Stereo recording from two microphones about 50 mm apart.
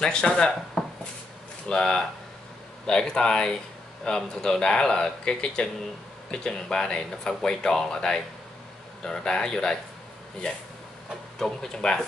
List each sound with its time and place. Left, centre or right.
0.0 s speech: centre
11.3 s speech: centre